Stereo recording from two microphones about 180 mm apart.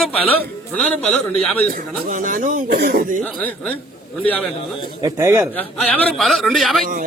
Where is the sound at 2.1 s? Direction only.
45° right (ahead or behind).